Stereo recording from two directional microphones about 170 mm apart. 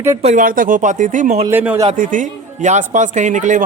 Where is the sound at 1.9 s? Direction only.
50° right (ahead or behind).